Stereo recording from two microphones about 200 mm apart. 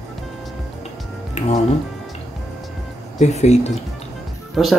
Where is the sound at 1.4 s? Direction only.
35° left (ahead or behind).